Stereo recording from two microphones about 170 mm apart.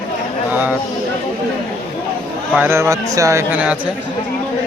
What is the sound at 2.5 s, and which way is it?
Speech, 15° right (ahead or behind).